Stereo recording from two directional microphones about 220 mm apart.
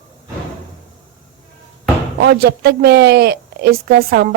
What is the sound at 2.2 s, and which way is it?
A woman's voice, 45° right (ahead or behind).